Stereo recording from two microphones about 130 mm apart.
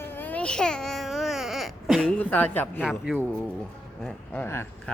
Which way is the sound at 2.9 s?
5° right (ahead or behind).